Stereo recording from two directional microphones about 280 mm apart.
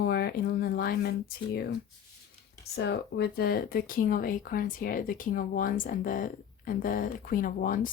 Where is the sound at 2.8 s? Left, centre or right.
Left.